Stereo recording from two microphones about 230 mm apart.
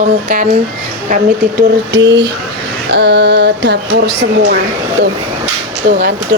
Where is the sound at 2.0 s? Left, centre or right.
Right.